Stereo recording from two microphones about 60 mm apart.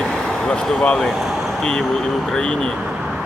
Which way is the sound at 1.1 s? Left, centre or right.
Centre.